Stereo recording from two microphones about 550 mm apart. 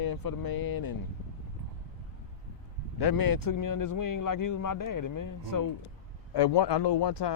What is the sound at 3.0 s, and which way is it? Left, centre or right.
Speech, left.